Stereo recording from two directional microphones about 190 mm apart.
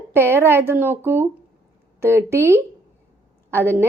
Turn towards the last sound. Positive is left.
turn(degrees=-10)  # may be behind; listen again after turning